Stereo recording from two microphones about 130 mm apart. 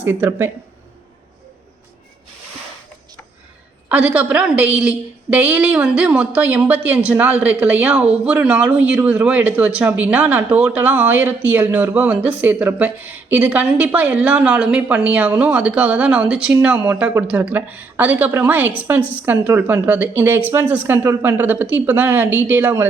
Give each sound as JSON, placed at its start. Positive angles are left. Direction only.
{"t": 0.0, "sound": "speech", "side_deg": -15}
{"t": 3.8, "sound": "speech", "side_deg": -10}